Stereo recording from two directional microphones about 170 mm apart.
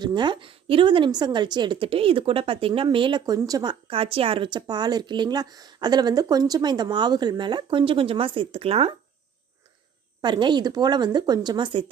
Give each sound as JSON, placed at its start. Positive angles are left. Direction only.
{"t": 0.0, "sound": "a woman's voice", "side_deg": -25}
{"t": 10.2, "sound": "a woman's voice", "side_deg": -25}